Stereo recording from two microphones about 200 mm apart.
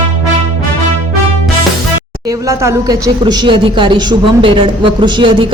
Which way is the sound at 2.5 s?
15° right (ahead or behind).